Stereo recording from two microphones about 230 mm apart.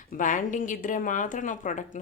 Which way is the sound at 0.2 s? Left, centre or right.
Left.